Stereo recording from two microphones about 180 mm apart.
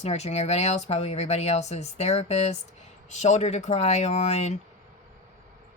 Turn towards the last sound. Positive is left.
turn(degrees=35)  # may be behind; listen again after turning